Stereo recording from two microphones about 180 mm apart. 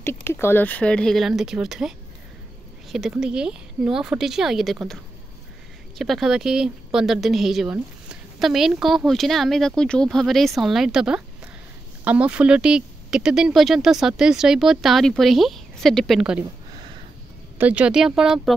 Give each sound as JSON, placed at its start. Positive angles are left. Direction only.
{"t": 0.0, "sound": "a woman's voice", "side_deg": 15}
{"t": 17.6, "sound": "a woman's voice", "side_deg": -10}